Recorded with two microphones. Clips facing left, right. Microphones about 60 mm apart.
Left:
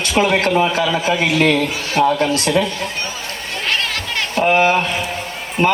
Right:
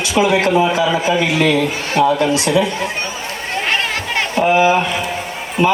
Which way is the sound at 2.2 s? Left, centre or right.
Left.